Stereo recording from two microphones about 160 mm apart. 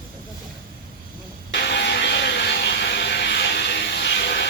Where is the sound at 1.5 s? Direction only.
90° left.